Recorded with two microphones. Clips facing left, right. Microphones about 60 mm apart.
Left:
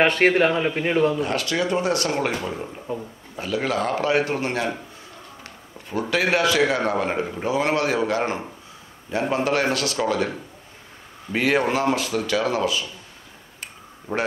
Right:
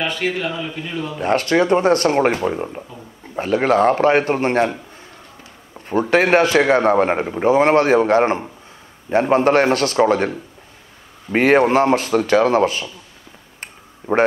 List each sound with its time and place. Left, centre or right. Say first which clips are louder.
0.0 s a man's voice: left 5 dB; left
1.1 s a man's voice: right 7 dB; right
5.9 s a man's voice: right 7 dB; right
11.3 s a man's voice: right 7 dB; right
13.6 s a sound: right 3 dB; right